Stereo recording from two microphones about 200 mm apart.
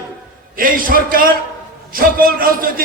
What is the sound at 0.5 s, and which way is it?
A man's voice, 45° right (ahead or behind).